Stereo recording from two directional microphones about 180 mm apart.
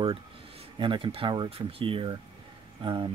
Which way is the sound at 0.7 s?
30° right (ahead or behind).